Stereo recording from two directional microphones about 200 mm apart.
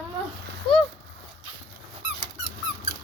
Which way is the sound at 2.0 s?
35° right (ahead or behind).